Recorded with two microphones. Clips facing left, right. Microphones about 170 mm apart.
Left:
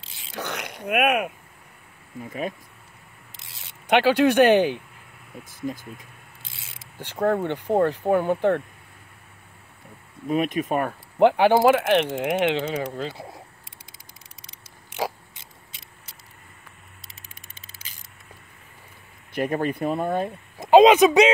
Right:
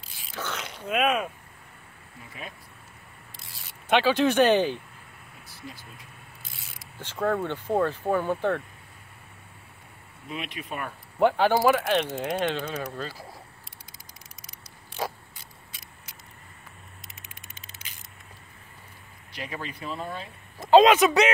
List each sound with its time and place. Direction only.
0.3 s speech: 15° left (ahead or behind)
0.9 s speech: 65° left (ahead or behind)
2.2 s speech: 45° left (ahead or behind)
3.8 s speech: 15° left (ahead or behind)
5.5 s speech: 45° left (ahead or behind)
6.6 s pulleys: 25° left (ahead or behind)
7.4 s speech: 15° left (ahead or behind)
10.2 s speech: 45° left (ahead or behind)
11.2 s speech: 15° left (ahead or behind)
14.4 s a sound: 20° left (ahead or behind)
19.3 s speech: 55° left (ahead or behind)
20.5 s speech: 15° left (ahead or behind)